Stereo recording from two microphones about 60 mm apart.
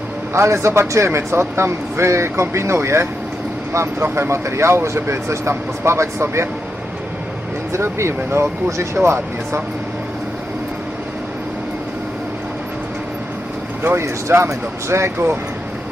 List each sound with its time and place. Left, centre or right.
0.3 s speech: right
7.7 s speech: right
13.8 s speech: right